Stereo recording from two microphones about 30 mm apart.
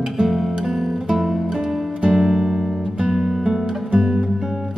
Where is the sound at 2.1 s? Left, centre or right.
Centre.